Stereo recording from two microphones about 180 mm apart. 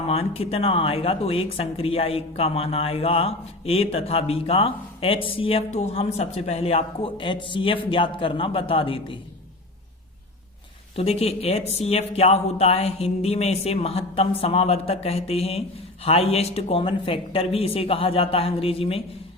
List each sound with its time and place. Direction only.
0.1 s speech: 35° left (ahead or behind)
10.9 s speech: 35° left (ahead or behind)